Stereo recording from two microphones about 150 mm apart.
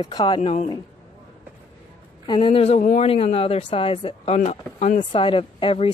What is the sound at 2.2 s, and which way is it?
Speech, 35° left (ahead or behind).